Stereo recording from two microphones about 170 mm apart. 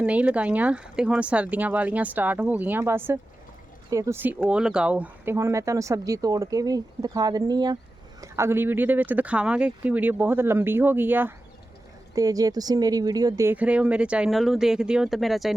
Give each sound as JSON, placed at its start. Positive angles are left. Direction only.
{"t": 0.0, "sound": "speech", "side_deg": -10}